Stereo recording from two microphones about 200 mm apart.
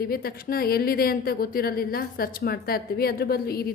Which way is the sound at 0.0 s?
50° left (ahead or behind).